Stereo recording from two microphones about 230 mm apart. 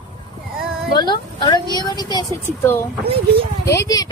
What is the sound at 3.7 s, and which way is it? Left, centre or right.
Speech, centre.